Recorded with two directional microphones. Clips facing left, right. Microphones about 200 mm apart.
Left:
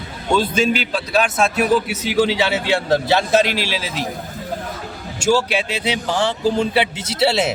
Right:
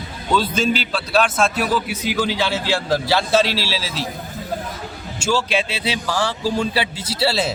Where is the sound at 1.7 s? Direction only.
25° left (ahead or behind).